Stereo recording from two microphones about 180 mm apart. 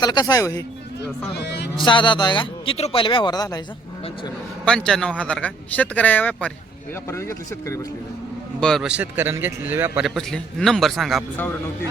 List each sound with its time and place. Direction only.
0.0 s a man's voice: 20° left (ahead or behind)
1.4 s speech: 70° left (ahead or behind)
1.8 s a man's voice: 25° left (ahead or behind)
4.6 s a man's voice: 5° left (ahead or behind)
8.6 s a man's voice: centre (ahead or behind)
10.2 s a man's voice: centre (ahead or behind)